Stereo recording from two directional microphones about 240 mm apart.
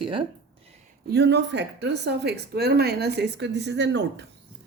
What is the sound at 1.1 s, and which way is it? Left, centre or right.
Speech, right.